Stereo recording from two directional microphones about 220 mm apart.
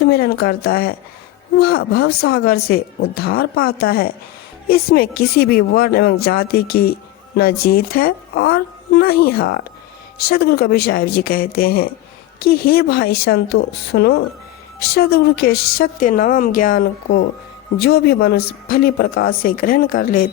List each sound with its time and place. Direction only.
0.0 s a woman's voice: 45° left (ahead or behind)